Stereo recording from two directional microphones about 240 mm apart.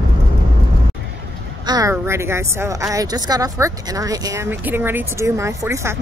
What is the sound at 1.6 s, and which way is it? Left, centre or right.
A woman's voice, centre.